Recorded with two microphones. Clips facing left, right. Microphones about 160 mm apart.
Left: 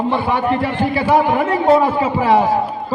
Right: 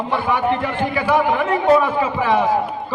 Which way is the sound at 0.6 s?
35° left (ahead or behind).